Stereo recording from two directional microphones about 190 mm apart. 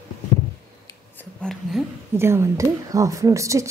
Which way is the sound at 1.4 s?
Centre (ahead or behind).